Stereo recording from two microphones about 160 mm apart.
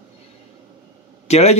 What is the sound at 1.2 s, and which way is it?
Speech, 40° left (ahead or behind).